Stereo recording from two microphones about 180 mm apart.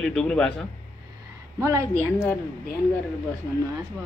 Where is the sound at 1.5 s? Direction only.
15° right (ahead or behind).